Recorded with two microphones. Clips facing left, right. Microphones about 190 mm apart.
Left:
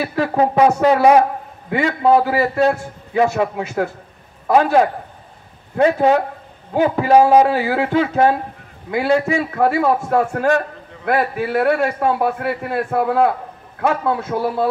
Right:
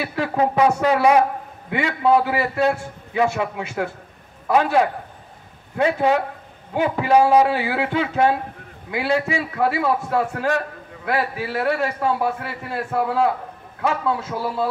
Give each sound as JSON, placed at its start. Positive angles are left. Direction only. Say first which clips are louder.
{"t": 0.0, "sound": "a man's voice", "louder": "left 4 dB", "side_deg": 40}